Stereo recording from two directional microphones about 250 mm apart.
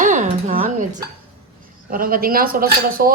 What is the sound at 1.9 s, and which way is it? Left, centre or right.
Speech, right.